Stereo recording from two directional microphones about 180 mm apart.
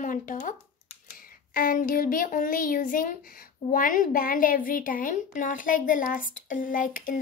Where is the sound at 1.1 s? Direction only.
50° left (ahead or behind).